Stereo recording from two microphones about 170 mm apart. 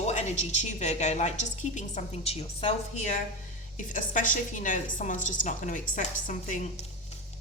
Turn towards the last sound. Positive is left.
turn(degrees=45)  # may be behind; listen again after turning